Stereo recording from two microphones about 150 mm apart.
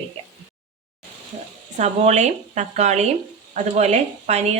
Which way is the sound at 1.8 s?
50° right (ahead or behind).